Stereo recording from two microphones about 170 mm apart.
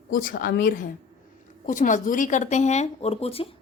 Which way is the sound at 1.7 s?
50° left (ahead or behind).